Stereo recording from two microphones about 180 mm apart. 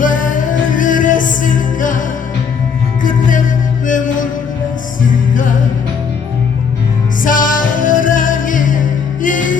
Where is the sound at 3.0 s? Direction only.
50° left (ahead or behind).